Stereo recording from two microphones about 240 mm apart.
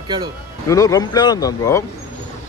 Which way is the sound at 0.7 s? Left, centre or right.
Centre.